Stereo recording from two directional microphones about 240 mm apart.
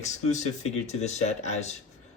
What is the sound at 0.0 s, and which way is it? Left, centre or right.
Speech, left.